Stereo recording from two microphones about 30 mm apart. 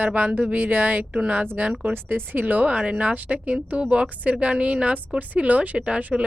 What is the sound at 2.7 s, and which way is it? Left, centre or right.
Speech, right.